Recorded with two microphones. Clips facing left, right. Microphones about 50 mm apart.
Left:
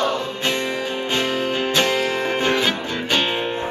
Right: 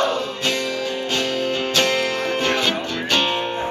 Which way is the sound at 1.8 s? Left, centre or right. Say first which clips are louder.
Even; centre.